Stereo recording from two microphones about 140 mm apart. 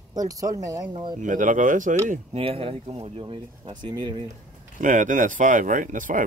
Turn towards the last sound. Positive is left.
turn(degrees=-65)  # may be behind; listen again after turning